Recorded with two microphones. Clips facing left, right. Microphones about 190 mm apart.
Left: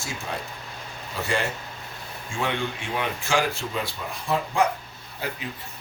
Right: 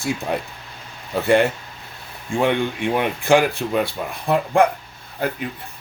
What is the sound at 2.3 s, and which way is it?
Speech, 60° right (ahead or behind).